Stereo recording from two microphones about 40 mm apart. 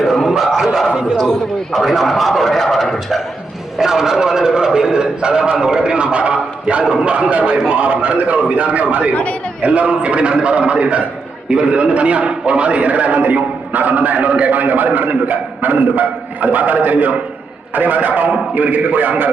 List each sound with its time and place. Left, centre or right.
0.0 s a sound: centre
1.9 s a man's voice: centre
3.8 s a man's voice: centre; by 19.3 s right